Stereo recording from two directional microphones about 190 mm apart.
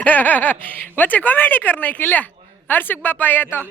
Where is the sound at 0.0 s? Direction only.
10° left (ahead or behind).